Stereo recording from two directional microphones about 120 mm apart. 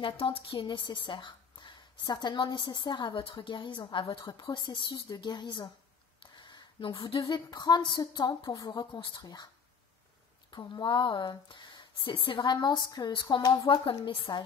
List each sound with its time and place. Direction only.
0.0 s a woman's voice: 50° left (ahead or behind)
0.7 s a woman's voice: 35° left (ahead or behind)
6.3 s a sound: 40° left (ahead or behind)
7.1 s a woman's voice: 45° left (ahead or behind)
10.5 s a woman's voice: 40° left (ahead or behind)